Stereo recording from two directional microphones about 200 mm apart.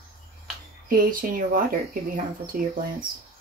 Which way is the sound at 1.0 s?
45° right (ahead or behind).